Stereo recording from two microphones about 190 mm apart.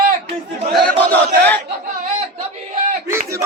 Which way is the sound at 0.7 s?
5° left (ahead or behind).